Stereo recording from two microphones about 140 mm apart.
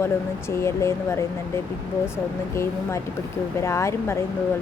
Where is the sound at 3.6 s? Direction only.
20° left (ahead or behind).